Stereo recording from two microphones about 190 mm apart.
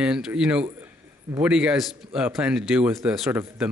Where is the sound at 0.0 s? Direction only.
5° right (ahead or behind).